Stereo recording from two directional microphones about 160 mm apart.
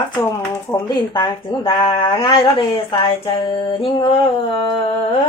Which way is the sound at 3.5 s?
35° left (ahead or behind).